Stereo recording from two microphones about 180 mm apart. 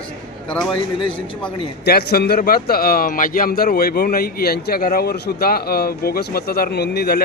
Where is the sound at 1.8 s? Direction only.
60° left (ahead or behind).